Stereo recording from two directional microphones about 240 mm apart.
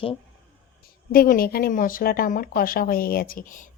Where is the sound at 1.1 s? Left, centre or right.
Left.